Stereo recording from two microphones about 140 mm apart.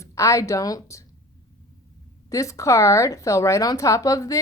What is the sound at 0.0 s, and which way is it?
Speech, 20° left (ahead or behind).